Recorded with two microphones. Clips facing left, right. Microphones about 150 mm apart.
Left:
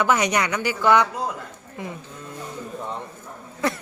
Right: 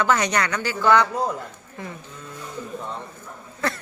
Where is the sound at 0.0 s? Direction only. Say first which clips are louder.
Left 1 dB; 15° left (ahead or behind).